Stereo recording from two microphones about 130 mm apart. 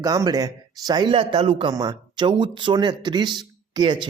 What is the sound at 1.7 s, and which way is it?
Speech, 30° right (ahead or behind).